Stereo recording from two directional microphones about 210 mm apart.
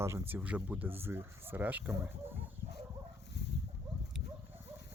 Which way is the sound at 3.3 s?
50° left (ahead or behind).